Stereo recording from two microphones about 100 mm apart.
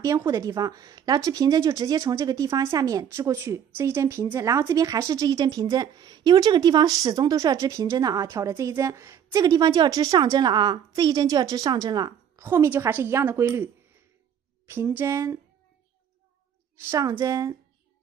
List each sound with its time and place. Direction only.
0.0 s speech: 35° right (ahead or behind)
12.4 s speech: 25° right (ahead or behind)
14.7 s speech: 20° right (ahead or behind)
16.8 s speech: 30° right (ahead or behind)